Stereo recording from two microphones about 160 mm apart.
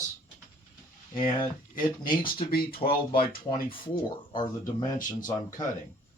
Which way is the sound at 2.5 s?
70° left (ahead or behind).